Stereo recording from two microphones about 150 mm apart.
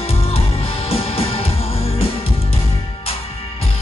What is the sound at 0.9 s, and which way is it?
Music, 40° left (ahead or behind).